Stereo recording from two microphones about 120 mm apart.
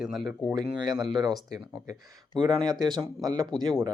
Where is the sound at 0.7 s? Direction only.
35° right (ahead or behind).